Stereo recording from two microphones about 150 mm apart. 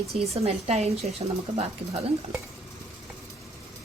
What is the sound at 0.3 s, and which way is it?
Speech, 45° right (ahead or behind).